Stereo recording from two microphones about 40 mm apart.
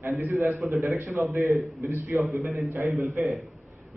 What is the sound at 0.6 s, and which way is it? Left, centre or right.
A man's voice, centre.